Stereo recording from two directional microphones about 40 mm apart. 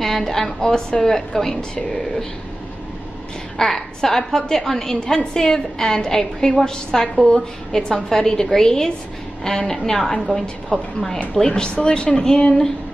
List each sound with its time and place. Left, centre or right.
0.0 s a woman's voice: centre
1.1 s a woman's voice: centre
3.5 s a woman's voice: centre